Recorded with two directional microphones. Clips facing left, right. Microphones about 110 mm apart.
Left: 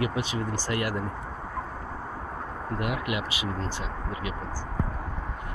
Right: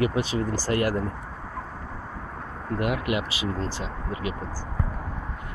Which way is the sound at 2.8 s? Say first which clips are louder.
Right 4 dB; 35° right (ahead or behind).